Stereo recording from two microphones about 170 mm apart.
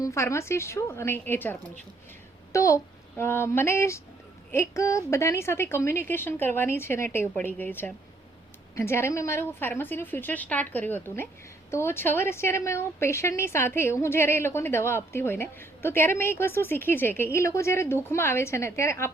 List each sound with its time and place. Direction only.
0.0 s a woman's voice: 15° left (ahead or behind)